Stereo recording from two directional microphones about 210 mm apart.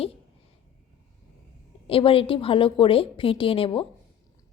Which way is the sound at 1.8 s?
25° left (ahead or behind).